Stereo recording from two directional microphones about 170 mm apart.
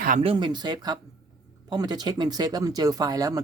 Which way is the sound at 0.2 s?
30° right (ahead or behind).